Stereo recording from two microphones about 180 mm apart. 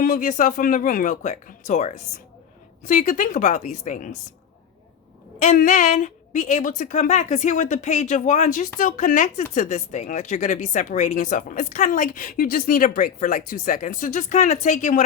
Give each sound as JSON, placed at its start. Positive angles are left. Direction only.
{"t": 0.0, "sound": "a woman's voice", "side_deg": 45}
{"t": 5.4, "sound": "a woman's voice", "side_deg": 45}